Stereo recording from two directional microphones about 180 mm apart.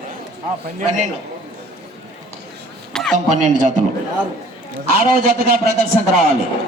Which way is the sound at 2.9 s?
Centre (ahead or behind).